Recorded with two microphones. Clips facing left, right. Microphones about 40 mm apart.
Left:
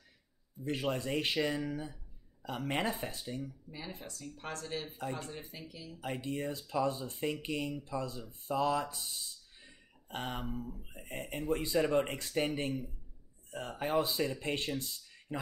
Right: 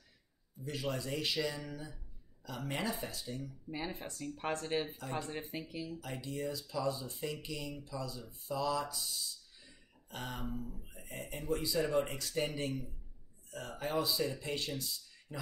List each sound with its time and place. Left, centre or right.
0.7 s speech: left
3.7 s speech: right
5.9 s speech: left
11.1 s speech: left